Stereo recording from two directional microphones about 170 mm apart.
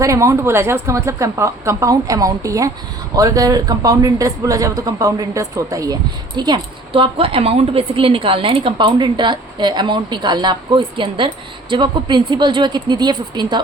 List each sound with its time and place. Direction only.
0.0 s speech: 20° right (ahead or behind)